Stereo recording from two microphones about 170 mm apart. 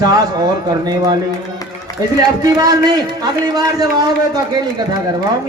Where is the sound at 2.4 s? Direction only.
20° right (ahead or behind).